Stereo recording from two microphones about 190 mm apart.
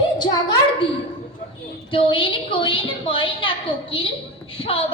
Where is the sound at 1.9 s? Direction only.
25° left (ahead or behind).